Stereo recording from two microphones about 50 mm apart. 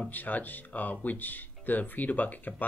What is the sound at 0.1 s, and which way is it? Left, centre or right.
Speech, left.